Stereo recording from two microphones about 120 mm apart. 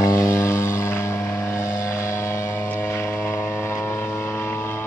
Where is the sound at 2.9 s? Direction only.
20° left (ahead or behind).